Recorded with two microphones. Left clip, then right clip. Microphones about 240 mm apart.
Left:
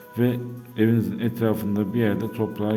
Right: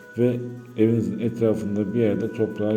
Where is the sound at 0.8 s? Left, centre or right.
Left.